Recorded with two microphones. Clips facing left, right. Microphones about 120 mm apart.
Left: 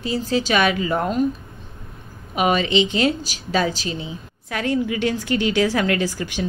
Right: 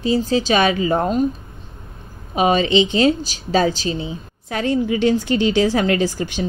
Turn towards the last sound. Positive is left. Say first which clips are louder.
# right 3 dB
turn(degrees=-25)  # may be behind; listen again after turning